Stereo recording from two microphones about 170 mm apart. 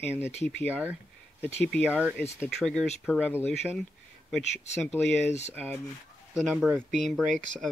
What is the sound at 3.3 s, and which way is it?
Speech, 15° left (ahead or behind).